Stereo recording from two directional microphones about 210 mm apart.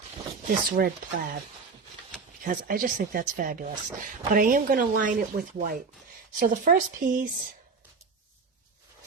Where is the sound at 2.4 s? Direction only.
40° right (ahead or behind).